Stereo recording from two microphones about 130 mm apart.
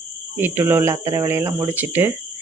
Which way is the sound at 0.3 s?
15° right (ahead or behind).